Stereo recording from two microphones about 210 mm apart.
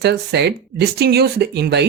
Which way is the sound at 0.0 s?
55° right (ahead or behind).